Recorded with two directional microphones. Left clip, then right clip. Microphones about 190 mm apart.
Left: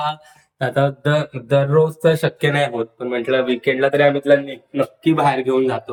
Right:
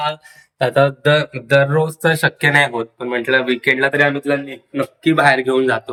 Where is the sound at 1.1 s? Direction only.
5° left (ahead or behind).